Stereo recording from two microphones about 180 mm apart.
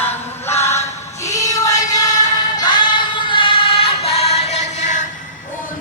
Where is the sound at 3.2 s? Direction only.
30° left (ahead or behind).